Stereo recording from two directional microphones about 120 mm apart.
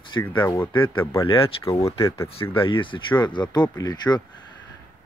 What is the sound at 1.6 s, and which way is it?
Speech, 25° left (ahead or behind).